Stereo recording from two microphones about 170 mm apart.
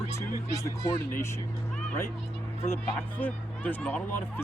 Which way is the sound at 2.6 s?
10° left (ahead or behind).